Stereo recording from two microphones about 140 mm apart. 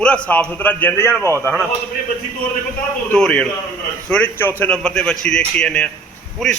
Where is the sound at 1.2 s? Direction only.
20° right (ahead or behind).